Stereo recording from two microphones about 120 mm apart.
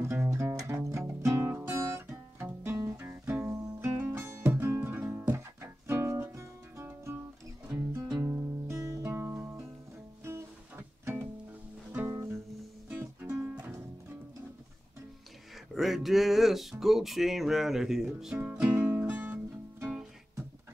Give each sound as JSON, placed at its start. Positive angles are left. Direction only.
{"t": 0.1, "sound": "music", "side_deg": -25}
{"t": 8.2, "sound": "music", "side_deg": -20}
{"t": 15.7, "sound": "music", "side_deg": 0}